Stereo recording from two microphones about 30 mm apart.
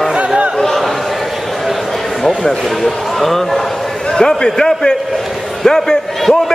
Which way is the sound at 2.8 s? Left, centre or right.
Centre.